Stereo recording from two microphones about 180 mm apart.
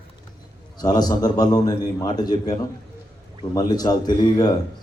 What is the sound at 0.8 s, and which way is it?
Speech, 20° left (ahead or behind).